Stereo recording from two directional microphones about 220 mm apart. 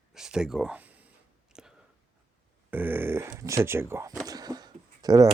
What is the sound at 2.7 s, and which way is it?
Speech, 10° right (ahead or behind).